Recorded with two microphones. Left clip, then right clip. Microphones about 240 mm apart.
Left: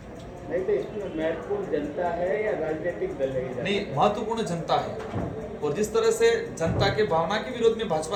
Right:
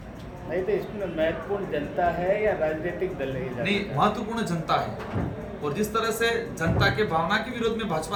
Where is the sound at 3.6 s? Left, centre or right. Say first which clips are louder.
Even; centre.